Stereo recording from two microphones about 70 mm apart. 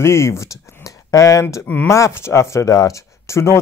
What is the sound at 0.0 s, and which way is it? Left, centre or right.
Speech, left.